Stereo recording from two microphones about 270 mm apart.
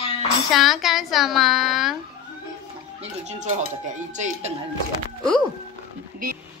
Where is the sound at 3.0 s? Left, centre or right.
Right.